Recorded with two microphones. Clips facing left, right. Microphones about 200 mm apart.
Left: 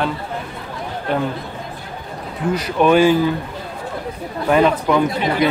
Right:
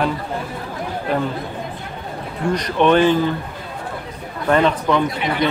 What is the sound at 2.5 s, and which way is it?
Speech, 5° left (ahead or behind).